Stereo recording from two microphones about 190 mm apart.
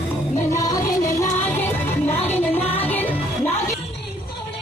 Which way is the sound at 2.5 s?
30° left (ahead or behind).